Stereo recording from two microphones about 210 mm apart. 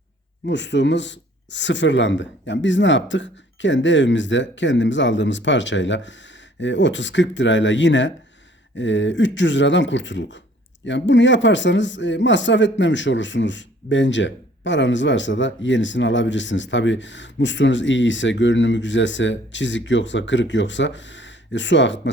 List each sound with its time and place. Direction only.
0.4 s a man's voice: 55° left (ahead or behind)